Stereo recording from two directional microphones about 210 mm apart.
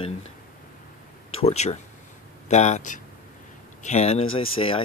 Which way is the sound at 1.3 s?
30° left (ahead or behind).